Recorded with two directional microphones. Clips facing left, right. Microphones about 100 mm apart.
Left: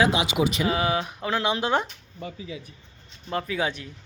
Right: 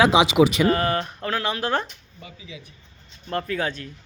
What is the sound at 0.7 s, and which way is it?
Speech, 10° left (ahead or behind).